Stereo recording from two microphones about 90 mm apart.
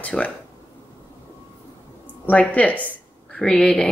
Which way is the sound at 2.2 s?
15° left (ahead or behind).